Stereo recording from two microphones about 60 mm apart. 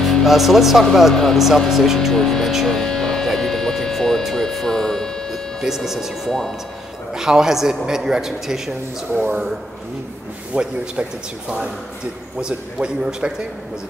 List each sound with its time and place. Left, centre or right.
0.0 s speech: centre
2.1 s speech: centre
2.5 s music: centre
4.2 s a sound: centre
5.6 s a man's voice: centre
9.1 s speech: right
10.5 s a man's voice: centre
12.4 s a man's voice: centre